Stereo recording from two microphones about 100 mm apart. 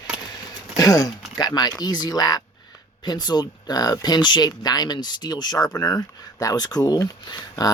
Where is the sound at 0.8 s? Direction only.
35° left (ahead or behind).